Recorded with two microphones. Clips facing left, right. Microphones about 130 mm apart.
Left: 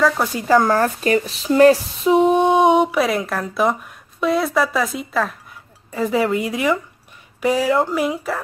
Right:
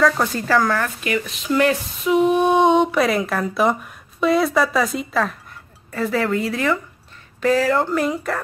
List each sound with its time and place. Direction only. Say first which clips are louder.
0.0 s speech: even; 10° left (ahead or behind)
0.6 s speech: left 4 dB; 35° left (ahead or behind)
2.4 s speech: left 1 dB; 15° left (ahead or behind); by 5.3 s centre (ahead or behind)
5.9 s speech: left 2 dB; 15° left (ahead or behind)